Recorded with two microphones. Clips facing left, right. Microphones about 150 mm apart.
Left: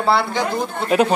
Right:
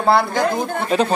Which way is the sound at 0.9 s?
10° left (ahead or behind).